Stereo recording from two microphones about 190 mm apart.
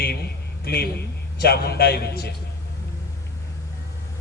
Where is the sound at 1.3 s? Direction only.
55° left (ahead or behind).